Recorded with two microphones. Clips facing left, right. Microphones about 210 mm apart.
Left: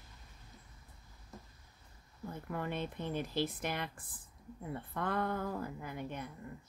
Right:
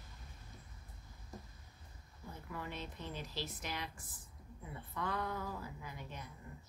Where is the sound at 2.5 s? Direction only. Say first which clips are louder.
Left 7 dB; 55° left (ahead or behind).